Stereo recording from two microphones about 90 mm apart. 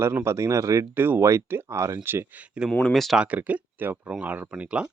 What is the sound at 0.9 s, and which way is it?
Speech, 25° right (ahead or behind).